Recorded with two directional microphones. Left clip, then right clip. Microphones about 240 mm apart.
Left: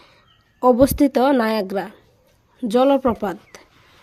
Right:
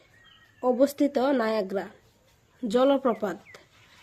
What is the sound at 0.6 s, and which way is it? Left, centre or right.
Speech, left.